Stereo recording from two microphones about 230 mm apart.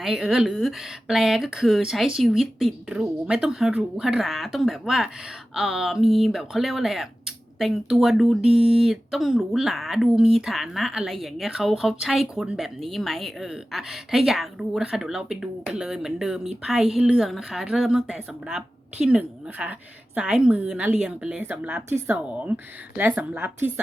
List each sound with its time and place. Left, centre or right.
0.0 s a woman's voice: centre
8.5 s speech: right
8.8 s a woman's voice: centre